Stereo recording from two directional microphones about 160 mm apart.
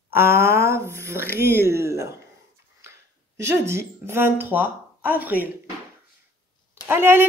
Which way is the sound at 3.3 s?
15° right (ahead or behind).